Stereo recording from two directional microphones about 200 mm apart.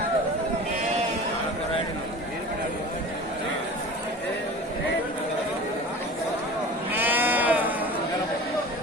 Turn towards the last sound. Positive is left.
turn(degrees=-10)  # may be behind; listen again after turning